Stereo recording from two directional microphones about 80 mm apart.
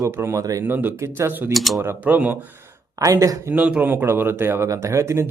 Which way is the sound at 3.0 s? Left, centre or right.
Right.